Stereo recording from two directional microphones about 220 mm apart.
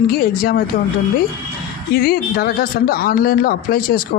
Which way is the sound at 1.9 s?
45° left (ahead or behind).